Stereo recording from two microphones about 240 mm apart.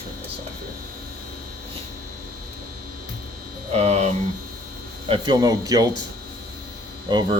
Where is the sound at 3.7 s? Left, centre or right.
Right.